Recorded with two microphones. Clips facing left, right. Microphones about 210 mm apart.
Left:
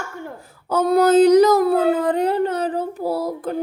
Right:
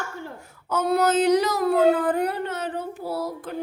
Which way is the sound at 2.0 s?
20° left (ahead or behind).